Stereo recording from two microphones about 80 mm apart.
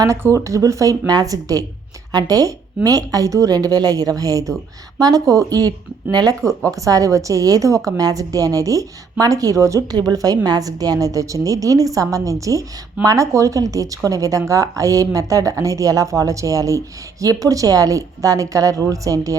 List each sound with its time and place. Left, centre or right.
0.2 s a woman's voice: right
10.0 s a woman's voice: right